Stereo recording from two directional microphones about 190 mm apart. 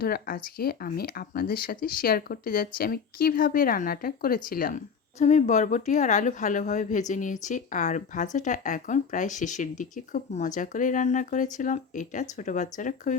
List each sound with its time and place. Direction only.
0.0 s speech: 55° left (ahead or behind)